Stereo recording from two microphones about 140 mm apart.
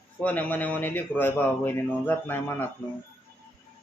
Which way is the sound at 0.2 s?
10° left (ahead or behind).